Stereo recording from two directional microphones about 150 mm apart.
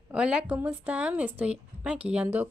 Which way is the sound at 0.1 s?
5° right (ahead or behind).